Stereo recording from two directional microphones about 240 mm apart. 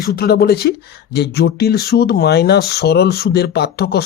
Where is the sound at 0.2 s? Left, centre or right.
Left.